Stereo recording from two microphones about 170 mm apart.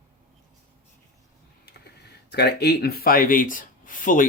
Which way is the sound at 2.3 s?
75° left (ahead or behind).